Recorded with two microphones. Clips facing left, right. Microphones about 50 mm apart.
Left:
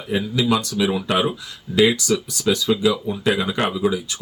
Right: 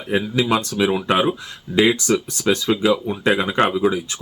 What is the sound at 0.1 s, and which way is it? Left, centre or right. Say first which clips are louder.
Speech: right 1 dB; right.